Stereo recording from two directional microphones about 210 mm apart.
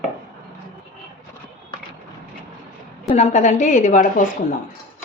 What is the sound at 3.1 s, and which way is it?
A woman's voice, 35° left (ahead or behind).